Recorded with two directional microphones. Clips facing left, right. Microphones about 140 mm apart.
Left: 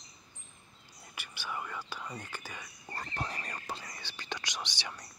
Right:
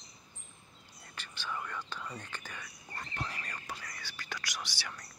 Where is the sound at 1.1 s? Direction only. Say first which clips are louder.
Even; 10° left (ahead or behind).